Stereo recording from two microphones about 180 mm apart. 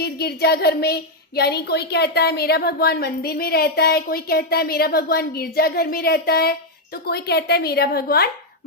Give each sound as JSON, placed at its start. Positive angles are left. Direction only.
{"t": 0.0, "sound": "speech", "side_deg": 60}